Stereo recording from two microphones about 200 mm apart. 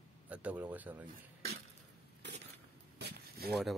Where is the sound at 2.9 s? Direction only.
55° right (ahead or behind).